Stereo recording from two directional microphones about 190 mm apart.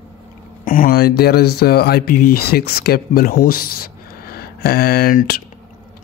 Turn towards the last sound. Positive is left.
turn(degrees=50)  # may be behind; listen again after turning